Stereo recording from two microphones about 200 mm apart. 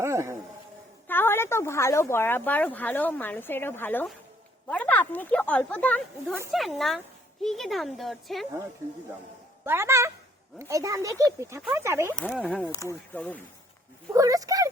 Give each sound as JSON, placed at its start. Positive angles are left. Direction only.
{"t": 0.0, "sound": "a man's voice", "side_deg": -15}
{"t": 1.0, "sound": "speech", "side_deg": 10}
{"t": 9.6, "sound": "speech", "side_deg": -15}
{"t": 12.1, "sound": "speech", "side_deg": 5}
{"t": 14.1, "sound": "a sound", "side_deg": -15}